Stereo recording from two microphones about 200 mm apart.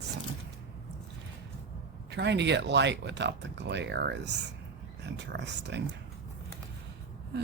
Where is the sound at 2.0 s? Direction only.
60° right (ahead or behind).